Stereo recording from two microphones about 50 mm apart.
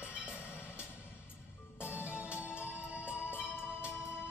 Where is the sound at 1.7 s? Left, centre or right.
Left.